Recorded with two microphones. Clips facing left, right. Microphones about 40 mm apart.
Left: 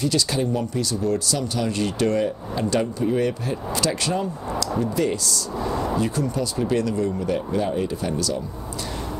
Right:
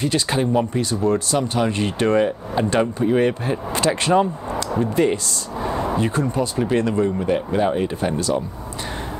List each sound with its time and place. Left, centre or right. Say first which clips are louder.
0.0 s speech: right 2 dB; right